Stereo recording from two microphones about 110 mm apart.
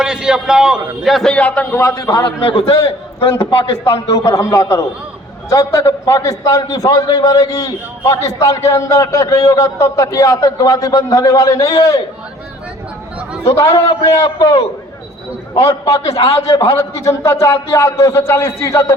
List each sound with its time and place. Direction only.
0.0 s a man's voice: 5° right (ahead or behind); by 1.6 s 10° left (ahead or behind)
1.7 s a man's voice: 25° left (ahead or behind)
2.0 s a man's voice: 40° left (ahead or behind)
4.2 s a man's voice: 30° left (ahead or behind)
13.4 s a man's voice: 30° left (ahead or behind)